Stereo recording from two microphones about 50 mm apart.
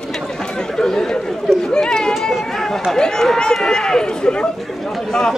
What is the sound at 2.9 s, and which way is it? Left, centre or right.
Speech, centre.